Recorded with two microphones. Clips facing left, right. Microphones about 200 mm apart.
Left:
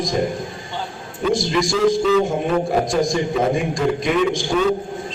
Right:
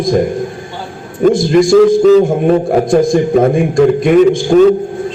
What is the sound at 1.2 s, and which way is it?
A man's voice, 55° right (ahead or behind).